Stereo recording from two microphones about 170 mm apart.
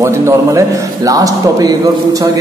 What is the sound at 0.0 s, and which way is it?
A man's voice, 15° right (ahead or behind).